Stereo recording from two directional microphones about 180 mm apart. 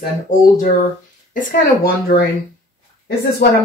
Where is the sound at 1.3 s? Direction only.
55° left (ahead or behind).